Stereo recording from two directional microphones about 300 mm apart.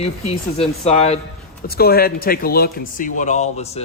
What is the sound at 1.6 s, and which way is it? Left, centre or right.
Speech, left.